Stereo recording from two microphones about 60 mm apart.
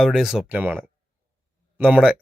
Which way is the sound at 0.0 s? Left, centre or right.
Centre.